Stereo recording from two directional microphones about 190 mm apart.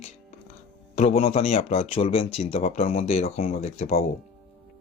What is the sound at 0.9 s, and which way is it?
Speech, 30° left (ahead or behind).